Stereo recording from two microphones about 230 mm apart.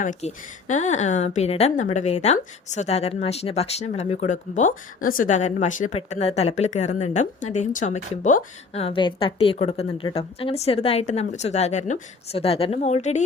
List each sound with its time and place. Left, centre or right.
0.0 s speech: left